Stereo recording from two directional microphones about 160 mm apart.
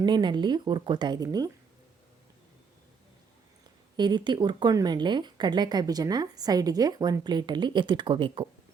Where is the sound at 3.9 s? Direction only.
30° right (ahead or behind).